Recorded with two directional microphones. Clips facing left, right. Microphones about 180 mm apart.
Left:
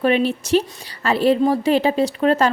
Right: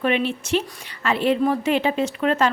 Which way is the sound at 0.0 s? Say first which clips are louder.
Left 4 dB; 40° left (ahead or behind).